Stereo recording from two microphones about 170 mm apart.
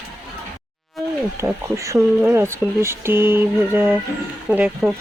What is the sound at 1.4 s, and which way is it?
Speech, 15° right (ahead or behind).